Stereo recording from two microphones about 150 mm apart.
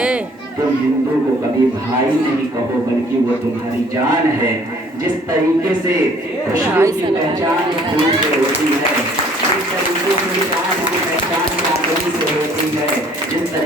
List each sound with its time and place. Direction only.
6.5 s speech: 20° right (ahead or behind)